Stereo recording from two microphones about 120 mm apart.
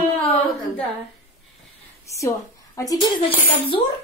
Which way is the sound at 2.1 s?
25° left (ahead or behind).